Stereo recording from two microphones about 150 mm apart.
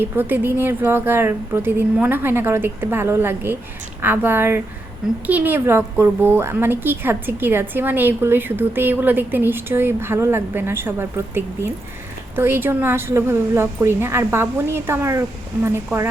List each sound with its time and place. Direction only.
0.0 s a woman's voice: 15° right (ahead or behind)